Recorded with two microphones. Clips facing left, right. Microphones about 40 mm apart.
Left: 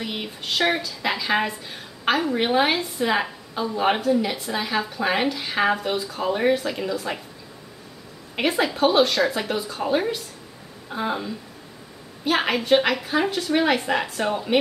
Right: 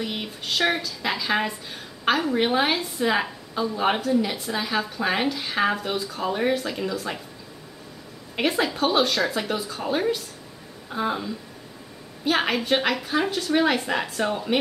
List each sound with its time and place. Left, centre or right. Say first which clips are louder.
0.0 s a woman's voice: even; centre
8.4 s a woman's voice: left 2 dB; centre